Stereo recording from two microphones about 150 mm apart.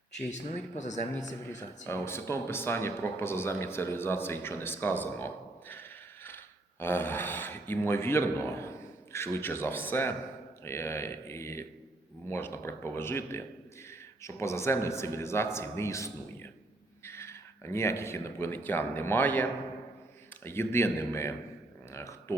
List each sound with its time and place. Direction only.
0.3 s speech: 50° left (ahead or behind)
1.5 s speech: 20° left (ahead or behind)
21.9 s a sound: 20° left (ahead or behind)